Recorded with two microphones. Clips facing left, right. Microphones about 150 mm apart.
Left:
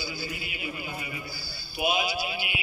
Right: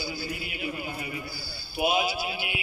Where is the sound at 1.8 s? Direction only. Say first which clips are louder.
Right 2 dB; 40° right (ahead or behind).